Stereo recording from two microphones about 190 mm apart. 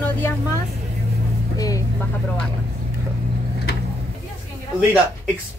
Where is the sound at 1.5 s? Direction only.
20° left (ahead or behind).